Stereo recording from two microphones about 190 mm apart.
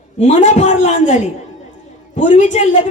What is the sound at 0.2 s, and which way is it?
Speech, 35° left (ahead or behind).